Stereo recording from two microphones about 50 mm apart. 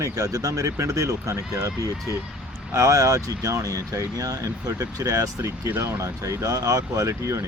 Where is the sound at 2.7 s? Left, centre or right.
Right.